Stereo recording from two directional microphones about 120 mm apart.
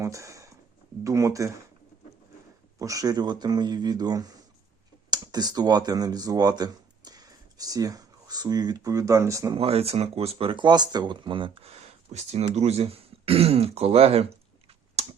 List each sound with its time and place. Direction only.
0.0 s a sound: 25° right (ahead or behind)
1.0 s speech: 25° right (ahead or behind)
2.7 s speech: 30° right (ahead or behind)
9.6 s speech: 55° right (ahead or behind)
15.0 s finger snapping: 60° right (ahead or behind)